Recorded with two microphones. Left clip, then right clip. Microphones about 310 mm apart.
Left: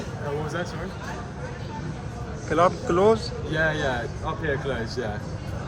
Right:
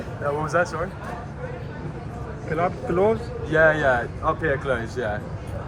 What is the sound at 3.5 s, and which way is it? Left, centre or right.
A man's voice, right.